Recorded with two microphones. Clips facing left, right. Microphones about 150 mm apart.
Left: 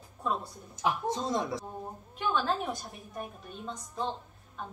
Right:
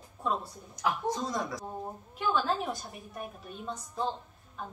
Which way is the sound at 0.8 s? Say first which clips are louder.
Even; 25° left (ahead or behind).